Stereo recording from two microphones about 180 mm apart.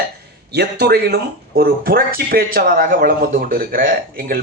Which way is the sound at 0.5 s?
65° right (ahead or behind).